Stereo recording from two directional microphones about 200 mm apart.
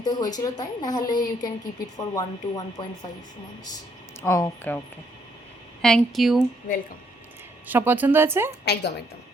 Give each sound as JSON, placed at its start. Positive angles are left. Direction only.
{"t": 0.0, "sound": "a woman's voice", "side_deg": 20}
{"t": 4.2, "sound": "speech", "side_deg": 15}
{"t": 5.8, "sound": "speech", "side_deg": 0}
{"t": 7.7, "sound": "a woman's voice", "side_deg": -10}
{"t": 8.6, "sound": "a woman's voice", "side_deg": 55}